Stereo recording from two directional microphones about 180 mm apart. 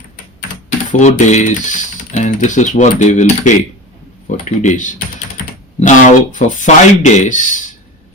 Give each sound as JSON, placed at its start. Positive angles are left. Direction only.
{"t": 0.9, "sound": "speech", "side_deg": 40}